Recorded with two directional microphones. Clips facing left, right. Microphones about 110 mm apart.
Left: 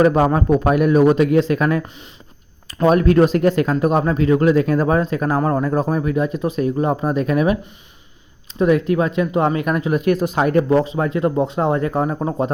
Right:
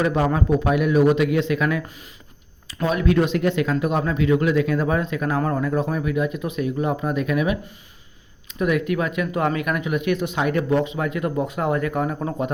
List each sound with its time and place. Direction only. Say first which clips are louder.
0.0 s speech: left 6 dB; 45° left (ahead or behind)
2.8 s speech: left 6 dB; 45° left (ahead or behind)